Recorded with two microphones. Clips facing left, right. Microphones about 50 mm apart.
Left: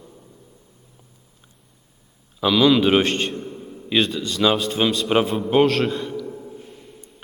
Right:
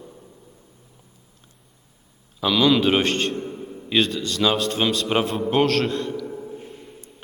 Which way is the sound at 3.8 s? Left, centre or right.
Centre.